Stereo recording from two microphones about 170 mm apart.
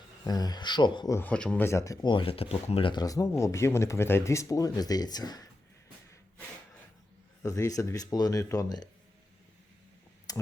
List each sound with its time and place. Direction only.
0.3 s speech: 25° left (ahead or behind)
1.1 s speech: 10° left (ahead or behind)
7.4 s speech: 20° left (ahead or behind)
10.3 s a sound: 20° left (ahead or behind)